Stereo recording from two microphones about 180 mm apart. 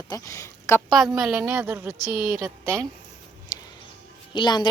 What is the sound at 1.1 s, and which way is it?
Speech, 5° right (ahead or behind).